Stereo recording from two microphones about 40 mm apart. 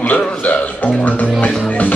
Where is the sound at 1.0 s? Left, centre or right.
Left.